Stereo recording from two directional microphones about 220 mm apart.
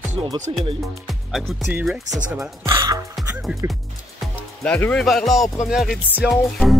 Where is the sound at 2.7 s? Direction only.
20° right (ahead or behind).